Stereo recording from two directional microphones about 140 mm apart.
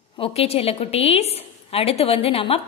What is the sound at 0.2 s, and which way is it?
A woman's voice, 45° left (ahead or behind).